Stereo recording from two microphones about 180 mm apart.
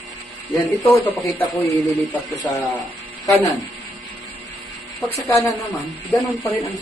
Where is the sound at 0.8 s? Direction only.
5° left (ahead or behind).